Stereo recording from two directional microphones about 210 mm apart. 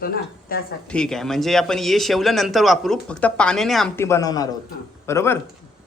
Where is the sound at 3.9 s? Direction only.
15° left (ahead or behind).